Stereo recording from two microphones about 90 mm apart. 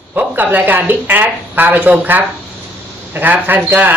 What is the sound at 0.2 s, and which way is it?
Speech, 20° right (ahead or behind).